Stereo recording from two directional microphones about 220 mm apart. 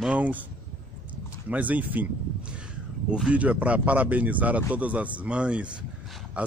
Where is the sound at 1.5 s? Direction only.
5° right (ahead or behind).